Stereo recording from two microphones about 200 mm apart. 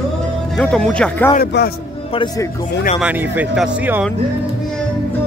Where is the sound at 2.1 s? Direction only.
20° left (ahead or behind).